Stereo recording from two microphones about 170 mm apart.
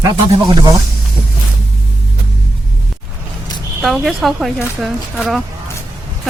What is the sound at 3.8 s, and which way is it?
Speech, centre (ahead or behind).